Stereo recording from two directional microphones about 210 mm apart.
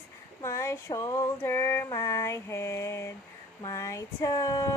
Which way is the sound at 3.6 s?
15° left (ahead or behind).